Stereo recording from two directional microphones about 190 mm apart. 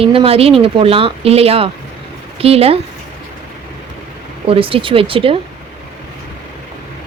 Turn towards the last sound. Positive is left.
turn(degrees=-30)  # may be behind; listen again after turning